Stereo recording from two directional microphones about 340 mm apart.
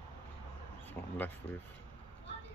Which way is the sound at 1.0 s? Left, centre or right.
Centre.